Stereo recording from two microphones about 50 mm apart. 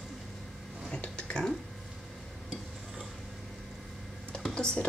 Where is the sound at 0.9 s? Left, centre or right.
Centre.